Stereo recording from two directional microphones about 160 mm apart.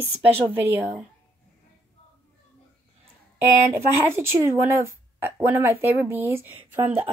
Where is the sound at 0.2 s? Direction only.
10° right (ahead or behind).